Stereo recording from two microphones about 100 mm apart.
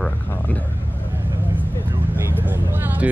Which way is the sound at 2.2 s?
20° right (ahead or behind).